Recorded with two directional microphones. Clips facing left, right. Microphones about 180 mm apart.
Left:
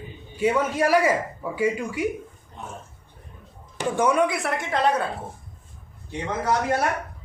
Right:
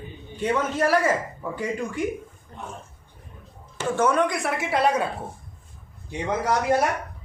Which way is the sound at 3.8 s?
15° left (ahead or behind).